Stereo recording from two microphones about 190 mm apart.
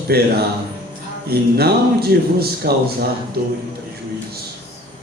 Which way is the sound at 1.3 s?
55° right (ahead or behind).